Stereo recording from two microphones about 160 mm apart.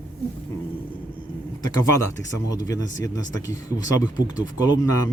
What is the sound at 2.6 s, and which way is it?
Speech, 20° left (ahead or behind).